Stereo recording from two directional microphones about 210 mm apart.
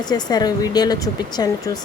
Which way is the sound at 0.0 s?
20° left (ahead or behind).